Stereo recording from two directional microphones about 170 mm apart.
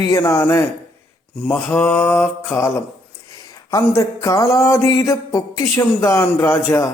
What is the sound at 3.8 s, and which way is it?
A man's voice, 15° left (ahead or behind).